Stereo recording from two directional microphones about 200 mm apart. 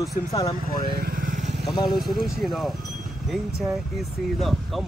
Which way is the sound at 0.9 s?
45° right (ahead or behind).